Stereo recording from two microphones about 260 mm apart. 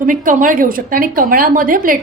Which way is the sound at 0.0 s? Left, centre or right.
Right.